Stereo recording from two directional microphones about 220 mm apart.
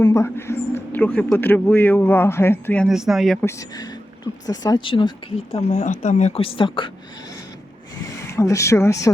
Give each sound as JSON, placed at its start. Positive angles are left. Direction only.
{"t": 0.0, "sound": "a man's voice", "side_deg": 15}
{"t": 3.4, "sound": "a woman's voice", "side_deg": 15}
{"t": 8.3, "sound": "a man's voice", "side_deg": 15}